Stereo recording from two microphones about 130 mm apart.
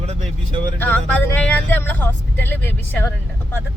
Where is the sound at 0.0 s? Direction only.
55° right (ahead or behind).